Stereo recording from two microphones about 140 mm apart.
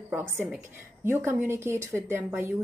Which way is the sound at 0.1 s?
15° right (ahead or behind).